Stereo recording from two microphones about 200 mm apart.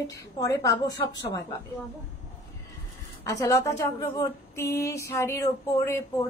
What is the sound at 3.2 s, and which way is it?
Female singing, 15° left (ahead or behind).